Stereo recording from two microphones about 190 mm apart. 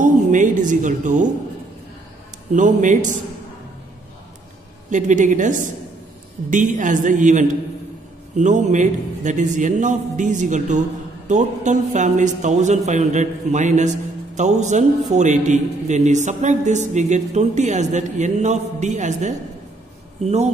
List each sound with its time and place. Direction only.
0.0 s speech: 40° right (ahead or behind)
2.5 s a man's voice: 40° right (ahead or behind)
4.8 s a man's voice: 40° right (ahead or behind)